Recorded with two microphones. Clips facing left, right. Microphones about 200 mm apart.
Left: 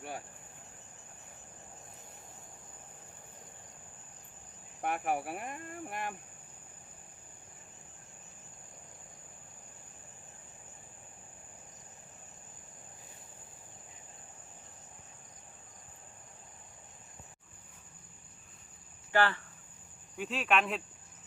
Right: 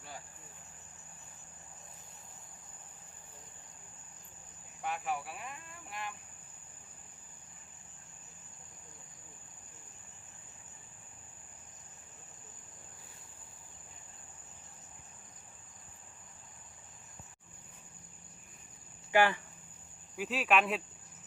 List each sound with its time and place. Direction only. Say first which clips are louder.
4.8 s speech: left 4 dB; 55° left (ahead or behind)
19.1 s speech: right 2 dB; 15° right (ahead or behind)
20.1 s speech: right 1 dB; centre (ahead or behind)